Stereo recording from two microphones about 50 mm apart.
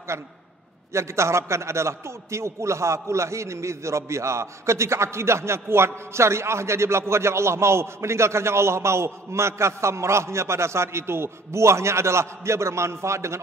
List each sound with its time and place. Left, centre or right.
0.1 s a man's voice: right